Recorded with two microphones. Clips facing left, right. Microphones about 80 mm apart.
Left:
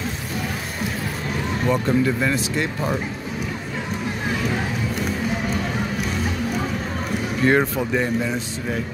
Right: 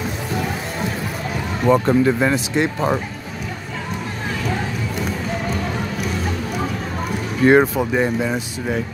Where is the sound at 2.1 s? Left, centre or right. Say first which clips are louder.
Right 4 dB; right.